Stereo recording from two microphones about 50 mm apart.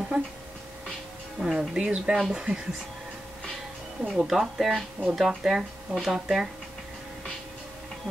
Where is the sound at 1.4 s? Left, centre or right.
Centre.